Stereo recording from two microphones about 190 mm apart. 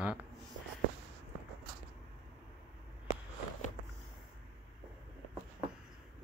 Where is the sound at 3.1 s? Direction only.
40° left (ahead or behind).